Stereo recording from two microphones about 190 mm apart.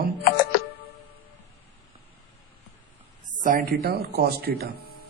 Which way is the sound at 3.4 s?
45° right (ahead or behind).